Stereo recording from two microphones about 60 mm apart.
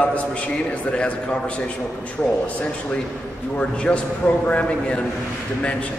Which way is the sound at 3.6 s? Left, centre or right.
Centre.